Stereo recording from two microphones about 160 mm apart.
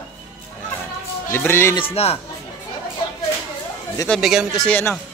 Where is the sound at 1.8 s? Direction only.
40° left (ahead or behind).